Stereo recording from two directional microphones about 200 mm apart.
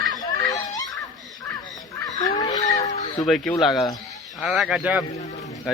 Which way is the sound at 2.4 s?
20° left (ahead or behind).